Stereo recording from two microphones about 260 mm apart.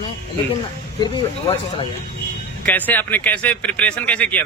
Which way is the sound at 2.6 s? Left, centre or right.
Centre.